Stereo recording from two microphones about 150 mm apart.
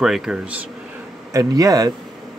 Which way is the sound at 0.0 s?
5° right (ahead or behind).